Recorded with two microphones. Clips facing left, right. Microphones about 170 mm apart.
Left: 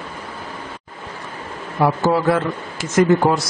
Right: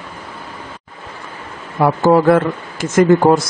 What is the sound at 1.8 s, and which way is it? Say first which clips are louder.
Speech: right 5 dB; 55° right (ahead or behind).